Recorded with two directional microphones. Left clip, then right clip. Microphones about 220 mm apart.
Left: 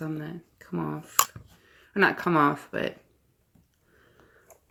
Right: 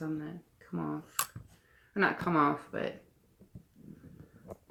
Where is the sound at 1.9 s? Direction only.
40° left (ahead or behind).